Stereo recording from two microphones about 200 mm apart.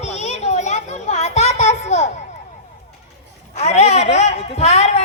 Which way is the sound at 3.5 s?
35° left (ahead or behind).